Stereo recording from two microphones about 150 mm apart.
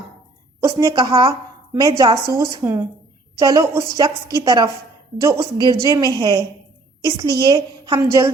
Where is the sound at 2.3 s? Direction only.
15° right (ahead or behind).